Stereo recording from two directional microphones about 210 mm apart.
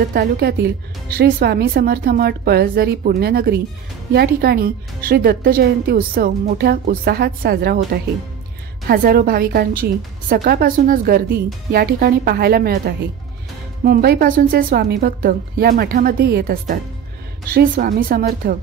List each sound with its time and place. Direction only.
0.1 s a woman's voice: 45° right (ahead or behind)